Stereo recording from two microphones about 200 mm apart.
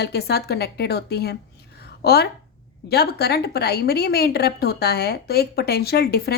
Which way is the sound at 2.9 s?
55° left (ahead or behind).